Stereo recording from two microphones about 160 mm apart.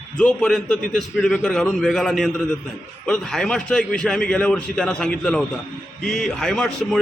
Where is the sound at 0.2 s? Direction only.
5° left (ahead or behind).